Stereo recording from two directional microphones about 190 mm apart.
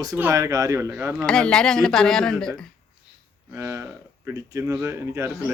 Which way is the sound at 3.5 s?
15° right (ahead or behind).